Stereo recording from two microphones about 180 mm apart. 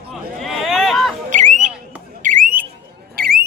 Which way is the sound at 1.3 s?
40° right (ahead or behind).